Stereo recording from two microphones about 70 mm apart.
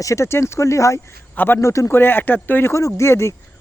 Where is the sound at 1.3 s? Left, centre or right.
Left.